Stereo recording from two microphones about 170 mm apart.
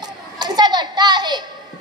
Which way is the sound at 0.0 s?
25° right (ahead or behind).